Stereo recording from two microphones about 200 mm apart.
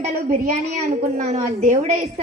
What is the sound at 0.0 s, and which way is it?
A woman's voice, 40° right (ahead or behind).